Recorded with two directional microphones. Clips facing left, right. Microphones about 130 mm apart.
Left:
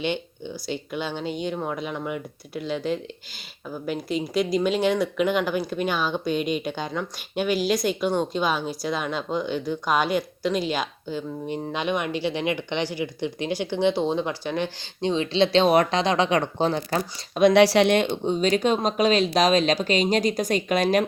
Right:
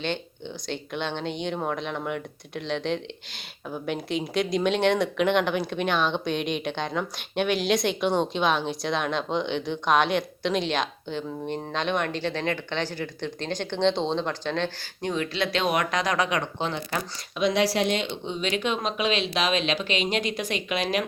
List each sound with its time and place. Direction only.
0.0 s speech: 10° left (ahead or behind)
15.0 s speech: 25° left (ahead or behind); by 17.5 s 40° left (ahead or behind)
17.5 s speech: 75° left (ahead or behind); by 21.0 s 45° left (ahead or behind)